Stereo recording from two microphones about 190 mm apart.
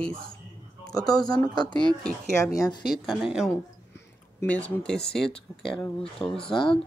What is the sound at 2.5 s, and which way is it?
Speech, 20° left (ahead or behind).